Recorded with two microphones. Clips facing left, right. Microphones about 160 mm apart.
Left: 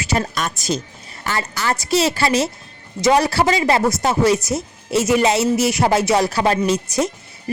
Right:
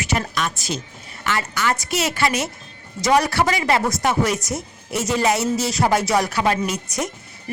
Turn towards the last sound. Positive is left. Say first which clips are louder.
# left 6 dB
turn(degrees=30)  # may be behind; listen again after turning